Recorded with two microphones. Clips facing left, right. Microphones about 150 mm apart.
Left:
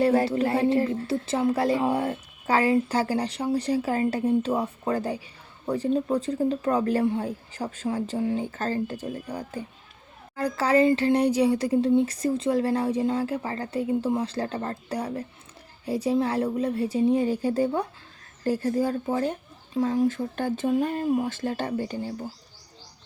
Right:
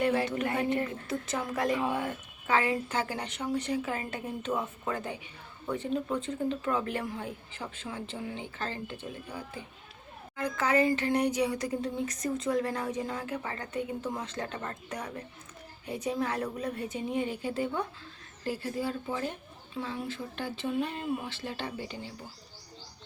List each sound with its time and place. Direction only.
0.0 s speech: 35° left (ahead or behind)